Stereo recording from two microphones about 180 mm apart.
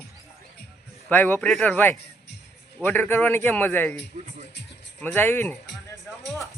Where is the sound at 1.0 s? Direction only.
10° left (ahead or behind).